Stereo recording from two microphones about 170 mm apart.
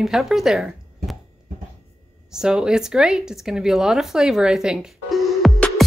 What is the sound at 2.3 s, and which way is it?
Speech, 5° right (ahead or behind).